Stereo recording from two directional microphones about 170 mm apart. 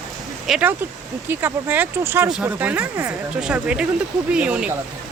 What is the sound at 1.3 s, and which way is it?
Speech, 15° right (ahead or behind).